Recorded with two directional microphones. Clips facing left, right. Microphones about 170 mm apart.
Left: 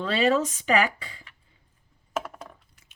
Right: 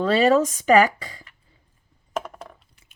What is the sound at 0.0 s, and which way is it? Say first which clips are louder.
Speech: right 5 dB; 40° right (ahead or behind).